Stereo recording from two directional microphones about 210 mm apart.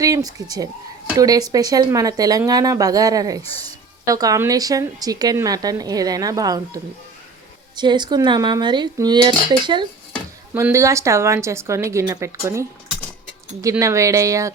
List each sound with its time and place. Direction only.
0.0 s speech: 15° right (ahead or behind)
7.8 s dishes: 20° right (ahead or behind)
10.5 s speech: 10° right (ahead or behind)